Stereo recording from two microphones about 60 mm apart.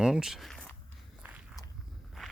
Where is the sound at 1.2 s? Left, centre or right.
Right.